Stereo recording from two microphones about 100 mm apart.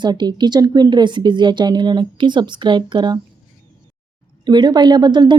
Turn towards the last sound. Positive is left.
turn(degrees=-50)  # may be behind; listen again after turning